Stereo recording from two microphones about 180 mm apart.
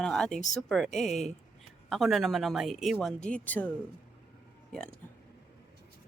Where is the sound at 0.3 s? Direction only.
40° left (ahead or behind).